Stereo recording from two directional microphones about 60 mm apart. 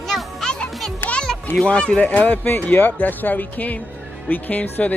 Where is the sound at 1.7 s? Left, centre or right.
Centre.